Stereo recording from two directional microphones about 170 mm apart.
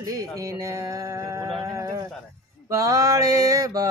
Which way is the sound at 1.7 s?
15° right (ahead or behind).